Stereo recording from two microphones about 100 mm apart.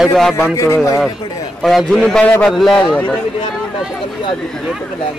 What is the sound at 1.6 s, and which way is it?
Speech, 5° left (ahead or behind).